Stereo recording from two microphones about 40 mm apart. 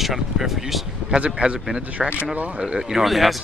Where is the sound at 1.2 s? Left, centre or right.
Right.